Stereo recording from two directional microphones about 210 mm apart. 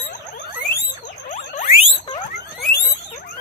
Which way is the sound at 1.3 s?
35° left (ahead or behind).